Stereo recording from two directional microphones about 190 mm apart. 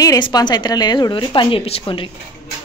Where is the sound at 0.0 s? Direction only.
20° left (ahead or behind).